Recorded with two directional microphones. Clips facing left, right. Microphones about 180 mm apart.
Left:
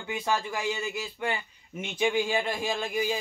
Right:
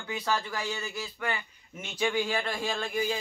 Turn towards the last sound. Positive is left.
turn(degrees=10)  # may be behind; listen again after turning